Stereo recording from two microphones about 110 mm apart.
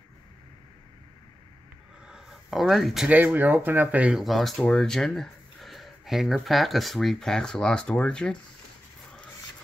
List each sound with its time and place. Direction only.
2.0 s a sound: 5° right (ahead or behind)
3.1 s speech: 15° right (ahead or behind)
4.2 s speech: centre (ahead or behind)